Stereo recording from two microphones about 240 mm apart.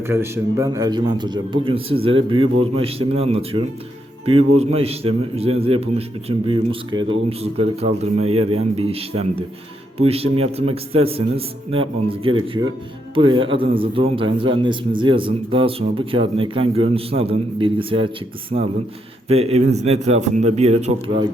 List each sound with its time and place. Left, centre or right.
0.0 s a man's voice: centre; by 21.2 s right